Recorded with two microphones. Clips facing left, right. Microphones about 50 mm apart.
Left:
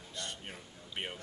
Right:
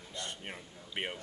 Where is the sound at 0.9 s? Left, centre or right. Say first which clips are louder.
Right 3 dB; centre.